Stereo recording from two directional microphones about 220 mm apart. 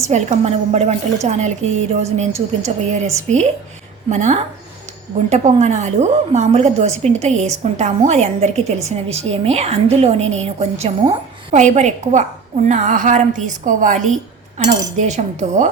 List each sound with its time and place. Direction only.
0.0 s a woman's voice: 30° right (ahead or behind)